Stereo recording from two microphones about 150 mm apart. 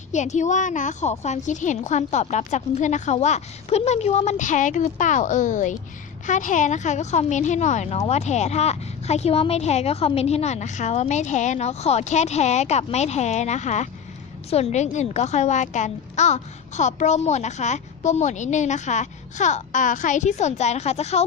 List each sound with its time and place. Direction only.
0.1 s a child's voice: 50° left (ahead or behind)